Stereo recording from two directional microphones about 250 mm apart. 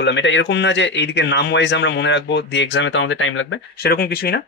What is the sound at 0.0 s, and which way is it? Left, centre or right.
Speech, left.